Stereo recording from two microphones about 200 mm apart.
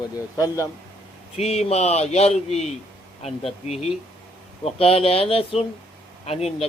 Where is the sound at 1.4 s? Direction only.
30° left (ahead or behind).